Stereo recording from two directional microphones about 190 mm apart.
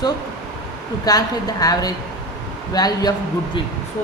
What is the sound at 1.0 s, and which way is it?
A man's voice, 20° left (ahead or behind).